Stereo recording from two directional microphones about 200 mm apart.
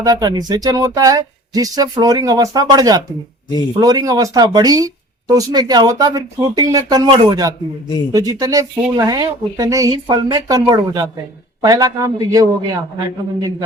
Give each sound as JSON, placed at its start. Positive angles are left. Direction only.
{"t": 0.0, "sound": "speech", "side_deg": -20}